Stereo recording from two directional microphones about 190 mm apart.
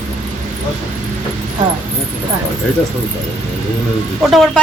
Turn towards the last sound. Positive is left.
turn(degrees=0)  # may be behind; listen again after turning